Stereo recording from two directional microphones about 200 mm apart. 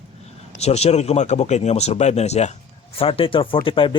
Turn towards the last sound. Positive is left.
turn(degrees=25)  # may be behind; listen again after turning